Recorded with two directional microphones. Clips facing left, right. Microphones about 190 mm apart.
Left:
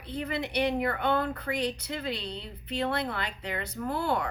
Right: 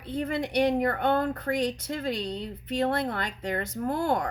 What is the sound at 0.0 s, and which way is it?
Speech, 50° right (ahead or behind).